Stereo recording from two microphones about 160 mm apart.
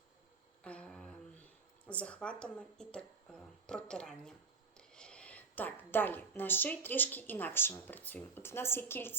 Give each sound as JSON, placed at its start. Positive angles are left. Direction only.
{"t": 0.6, "sound": "humming", "side_deg": 5}
{"t": 1.9, "sound": "a woman's voice", "side_deg": 5}